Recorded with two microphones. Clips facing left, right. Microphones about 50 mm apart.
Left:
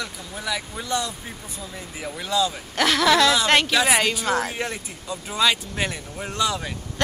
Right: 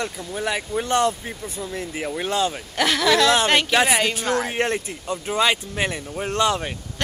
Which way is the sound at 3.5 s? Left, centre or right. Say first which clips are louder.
Even; centre.